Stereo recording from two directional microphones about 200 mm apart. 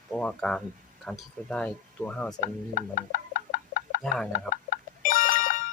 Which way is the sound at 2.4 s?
40° left (ahead or behind).